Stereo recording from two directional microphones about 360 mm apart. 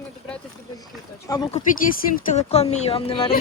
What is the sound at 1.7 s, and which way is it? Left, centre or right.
Speech, left.